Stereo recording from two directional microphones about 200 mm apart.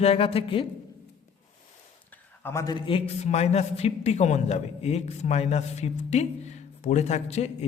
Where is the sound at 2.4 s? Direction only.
15° left (ahead or behind).